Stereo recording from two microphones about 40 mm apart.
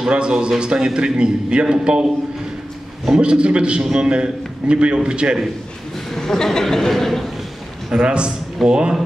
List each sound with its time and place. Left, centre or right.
0.0 s a man's voice: right
3.1 s a man's voice: right
6.1 s speech: centre
7.9 s a man's voice: right